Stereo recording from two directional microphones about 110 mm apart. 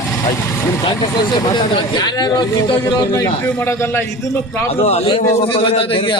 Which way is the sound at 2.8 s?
25° left (ahead or behind).